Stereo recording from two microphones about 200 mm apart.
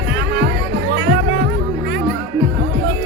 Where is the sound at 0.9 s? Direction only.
50° right (ahead or behind).